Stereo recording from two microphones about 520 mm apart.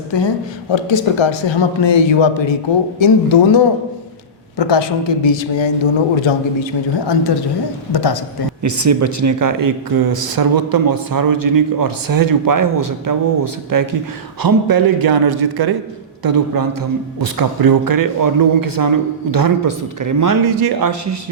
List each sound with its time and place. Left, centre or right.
0.1 s a man's voice: left
7.9 s a man's voice: left
8.6 s a man's voice: right